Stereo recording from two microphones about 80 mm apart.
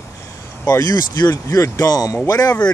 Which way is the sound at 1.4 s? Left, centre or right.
Left.